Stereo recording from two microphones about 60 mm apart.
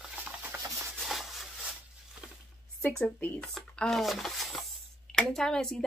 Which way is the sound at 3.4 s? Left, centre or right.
Centre.